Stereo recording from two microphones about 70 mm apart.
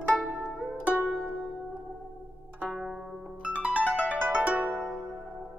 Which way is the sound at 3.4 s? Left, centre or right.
Centre.